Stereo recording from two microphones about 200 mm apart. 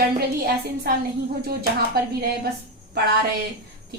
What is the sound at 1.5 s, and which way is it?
Speech, 50° right (ahead or behind).